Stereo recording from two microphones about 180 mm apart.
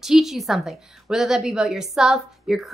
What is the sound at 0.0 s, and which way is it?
A woman's voice, centre (ahead or behind).